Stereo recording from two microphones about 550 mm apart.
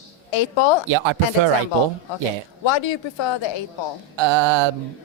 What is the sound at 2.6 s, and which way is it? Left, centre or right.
Speech, left.